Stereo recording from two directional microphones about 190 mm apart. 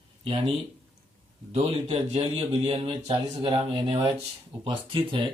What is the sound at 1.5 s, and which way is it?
Speech, 35° right (ahead or behind).